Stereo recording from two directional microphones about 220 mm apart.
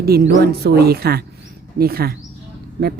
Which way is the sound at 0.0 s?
45° right (ahead or behind).